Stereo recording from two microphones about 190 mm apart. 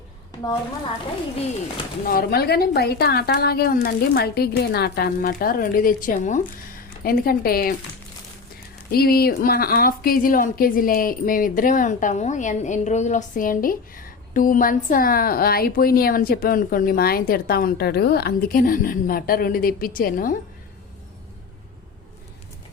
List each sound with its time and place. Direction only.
2.0 s a woman's voice: 55° left (ahead or behind)
8.9 s a woman's voice: 55° left (ahead or behind)